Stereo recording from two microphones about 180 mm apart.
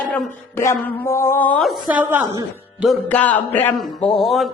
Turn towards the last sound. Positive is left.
turn(degrees=0)  # may be behind; listen again after turning